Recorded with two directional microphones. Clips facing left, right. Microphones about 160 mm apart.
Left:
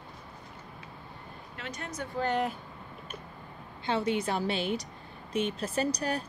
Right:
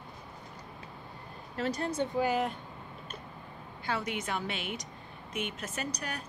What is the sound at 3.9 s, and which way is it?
A woman's voice, 30° left (ahead or behind).